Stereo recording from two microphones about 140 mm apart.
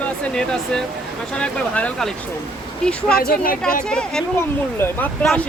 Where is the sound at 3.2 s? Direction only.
90° left.